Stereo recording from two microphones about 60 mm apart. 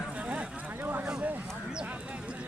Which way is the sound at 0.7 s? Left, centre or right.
Right.